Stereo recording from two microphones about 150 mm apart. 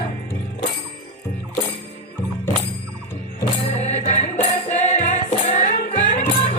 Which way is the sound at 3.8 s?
50° left (ahead or behind).